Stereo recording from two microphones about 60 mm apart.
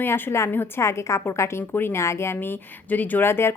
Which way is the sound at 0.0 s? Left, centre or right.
Left.